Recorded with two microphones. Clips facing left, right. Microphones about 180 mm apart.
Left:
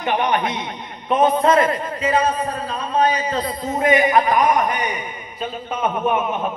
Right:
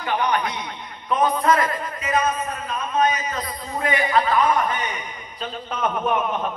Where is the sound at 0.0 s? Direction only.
20° left (ahead or behind).